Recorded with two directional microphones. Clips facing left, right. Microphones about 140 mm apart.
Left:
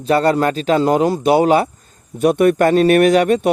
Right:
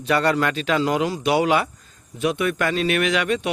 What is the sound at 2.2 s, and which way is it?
A man's voice, 50° left (ahead or behind).